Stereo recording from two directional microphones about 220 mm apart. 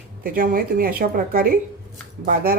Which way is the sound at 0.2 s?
40° right (ahead or behind).